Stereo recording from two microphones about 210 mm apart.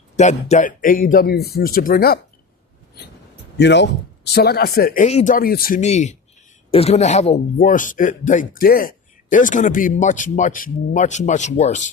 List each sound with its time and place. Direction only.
0.2 s speech: 35° left (ahead or behind)
3.6 s speech: 55° left (ahead or behind)
5.0 s speech: 35° left (ahead or behind)